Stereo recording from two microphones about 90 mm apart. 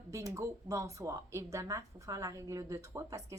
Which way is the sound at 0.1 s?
35° right (ahead or behind).